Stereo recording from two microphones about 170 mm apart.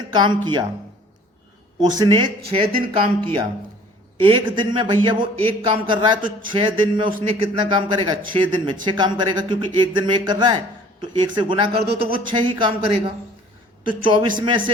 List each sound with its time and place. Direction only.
0.1 s a man's voice: 25° right (ahead or behind)
2.0 s a man's voice: 30° right (ahead or behind)